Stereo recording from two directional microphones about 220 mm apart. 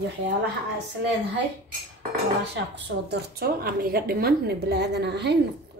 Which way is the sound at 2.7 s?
50° right (ahead or behind).